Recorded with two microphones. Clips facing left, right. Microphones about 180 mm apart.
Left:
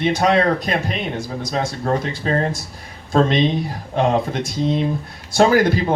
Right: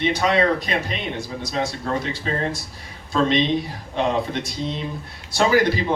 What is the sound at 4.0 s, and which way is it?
Speech, 45° left (ahead or behind).